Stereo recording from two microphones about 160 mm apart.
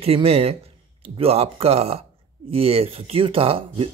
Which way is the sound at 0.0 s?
40° right (ahead or behind).